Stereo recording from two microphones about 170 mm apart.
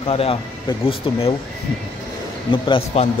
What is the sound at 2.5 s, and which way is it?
Speech, 30° left (ahead or behind).